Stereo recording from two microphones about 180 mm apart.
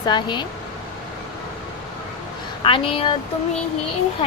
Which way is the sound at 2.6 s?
30° left (ahead or behind).